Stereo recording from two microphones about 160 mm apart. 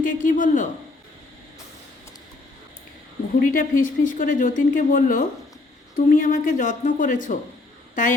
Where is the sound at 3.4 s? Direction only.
55° left (ahead or behind).